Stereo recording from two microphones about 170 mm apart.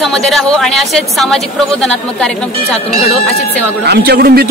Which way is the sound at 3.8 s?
75° right (ahead or behind).